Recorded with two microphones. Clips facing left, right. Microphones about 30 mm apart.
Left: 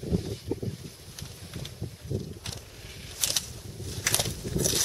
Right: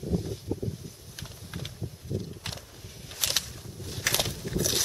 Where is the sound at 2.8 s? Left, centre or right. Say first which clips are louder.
Left 2 dB; left.